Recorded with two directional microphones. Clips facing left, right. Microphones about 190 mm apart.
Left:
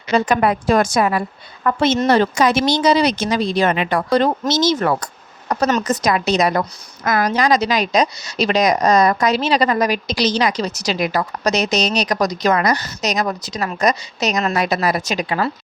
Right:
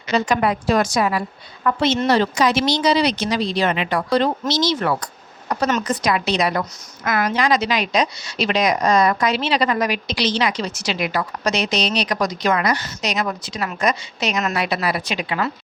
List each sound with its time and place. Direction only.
0.3 s a woman's voice: 50° left (ahead or behind)